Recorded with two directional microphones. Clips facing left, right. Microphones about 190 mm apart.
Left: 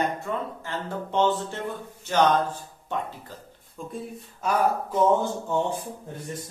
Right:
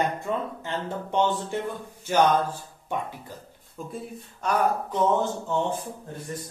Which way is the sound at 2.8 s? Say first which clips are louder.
Even; 10° right (ahead or behind).